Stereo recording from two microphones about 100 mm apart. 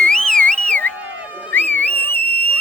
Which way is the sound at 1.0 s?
15° right (ahead or behind).